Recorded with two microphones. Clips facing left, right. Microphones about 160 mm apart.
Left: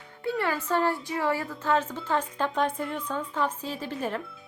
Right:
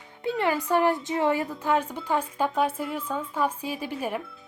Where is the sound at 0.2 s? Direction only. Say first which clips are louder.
Right 3 dB; 20° right (ahead or behind).